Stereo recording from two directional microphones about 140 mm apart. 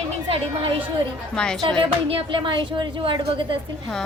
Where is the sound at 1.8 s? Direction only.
35° right (ahead or behind).